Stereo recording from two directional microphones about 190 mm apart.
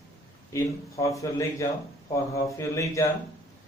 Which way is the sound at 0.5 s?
15° left (ahead or behind).